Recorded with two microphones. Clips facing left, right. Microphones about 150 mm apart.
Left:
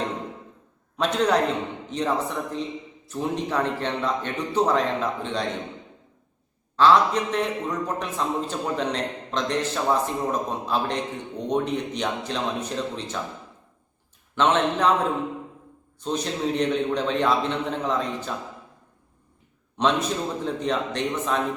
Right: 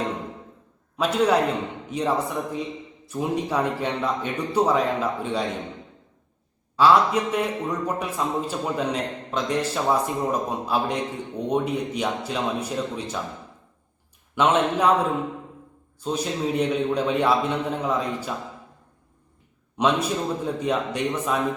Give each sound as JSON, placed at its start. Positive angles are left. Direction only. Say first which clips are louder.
{"t": 0.9, "sound": "a man's voice", "louder": "right 1 dB", "side_deg": -5}
{"t": 6.7, "sound": "a man's voice", "louder": "even", "side_deg": -10}
{"t": 14.3, "sound": "a man's voice", "louder": "right 1 dB", "side_deg": -10}
{"t": 16.0, "sound": "a man's voice", "louder": "right 1 dB", "side_deg": -5}
{"t": 19.7, "sound": "a man's voice", "louder": "right 1 dB", "side_deg": -10}